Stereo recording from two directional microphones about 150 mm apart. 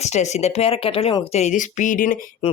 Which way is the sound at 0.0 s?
50° left (ahead or behind).